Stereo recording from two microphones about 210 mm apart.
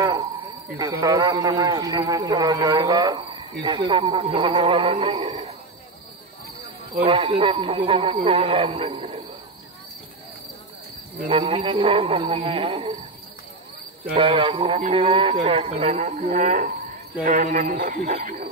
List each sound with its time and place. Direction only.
0.7 s a man's voice: 15° right (ahead or behind)
7.0 s a man's voice: 25° right (ahead or behind)
11.2 s a man's voice: 25° right (ahead or behind)
14.1 s a man's voice: 25° right (ahead or behind); by 18.5 s 45° right (ahead or behind)